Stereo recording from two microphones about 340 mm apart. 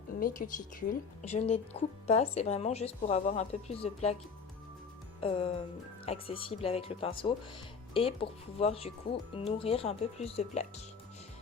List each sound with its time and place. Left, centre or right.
0.2 s a woman's voice: left
5.2 s speech: centre